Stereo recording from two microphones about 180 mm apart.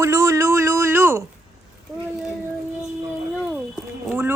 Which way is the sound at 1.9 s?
Centre (ahead or behind).